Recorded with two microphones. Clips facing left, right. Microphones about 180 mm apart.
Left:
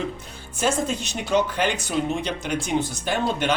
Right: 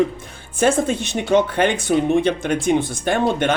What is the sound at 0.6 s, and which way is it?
A woman's voice, 55° right (ahead or behind).